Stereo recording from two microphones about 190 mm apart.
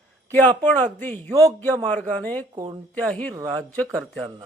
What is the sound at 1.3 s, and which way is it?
Speech, 15° right (ahead or behind).